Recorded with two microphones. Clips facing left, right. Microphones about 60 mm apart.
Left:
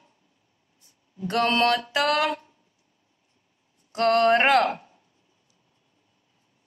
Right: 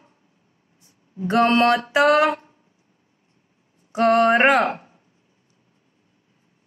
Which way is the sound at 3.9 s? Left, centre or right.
Centre.